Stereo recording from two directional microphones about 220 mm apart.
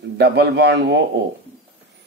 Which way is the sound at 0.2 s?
50° right (ahead or behind).